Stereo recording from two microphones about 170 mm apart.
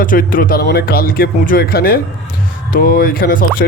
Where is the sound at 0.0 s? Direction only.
55° left (ahead or behind).